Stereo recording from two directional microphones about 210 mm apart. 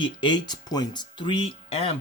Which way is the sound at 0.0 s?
20° left (ahead or behind).